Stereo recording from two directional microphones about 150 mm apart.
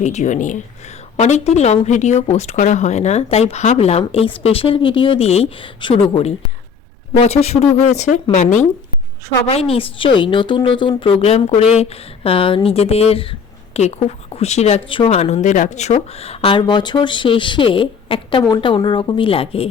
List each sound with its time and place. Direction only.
0.0 s speech: 50° left (ahead or behind)
9.5 s speech: 40° left (ahead or behind)